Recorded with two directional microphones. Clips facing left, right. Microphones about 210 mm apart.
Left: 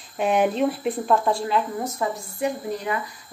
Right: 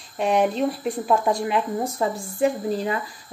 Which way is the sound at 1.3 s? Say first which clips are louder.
Right 1 dB; 20° right (ahead or behind).